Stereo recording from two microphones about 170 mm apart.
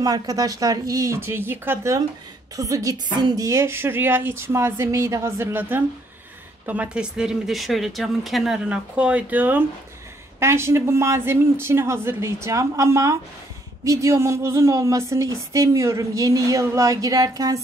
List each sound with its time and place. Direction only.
0.0 s a woman's voice: 20° right (ahead or behind)